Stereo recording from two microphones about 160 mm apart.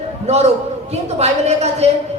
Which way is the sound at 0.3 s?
45° right (ahead or behind).